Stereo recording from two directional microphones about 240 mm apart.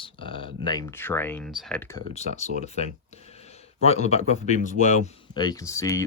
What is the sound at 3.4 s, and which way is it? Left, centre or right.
A man's voice, left.